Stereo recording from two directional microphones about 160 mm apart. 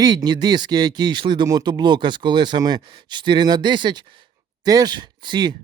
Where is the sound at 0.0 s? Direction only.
25° right (ahead or behind).